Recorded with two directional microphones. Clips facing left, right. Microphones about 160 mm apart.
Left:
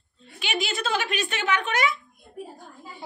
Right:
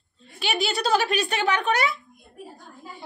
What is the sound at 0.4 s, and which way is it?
Speech, 35° right (ahead or behind).